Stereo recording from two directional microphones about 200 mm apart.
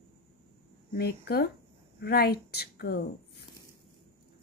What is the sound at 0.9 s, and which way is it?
A woman's voice, 50° left (ahead or behind).